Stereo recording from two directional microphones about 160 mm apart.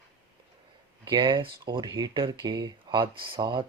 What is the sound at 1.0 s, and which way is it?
Speech, 30° right (ahead or behind).